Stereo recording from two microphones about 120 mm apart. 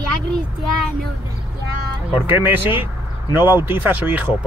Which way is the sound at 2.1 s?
15° right (ahead or behind).